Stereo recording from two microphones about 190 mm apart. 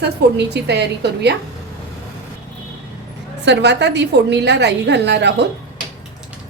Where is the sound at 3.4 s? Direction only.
65° right (ahead or behind).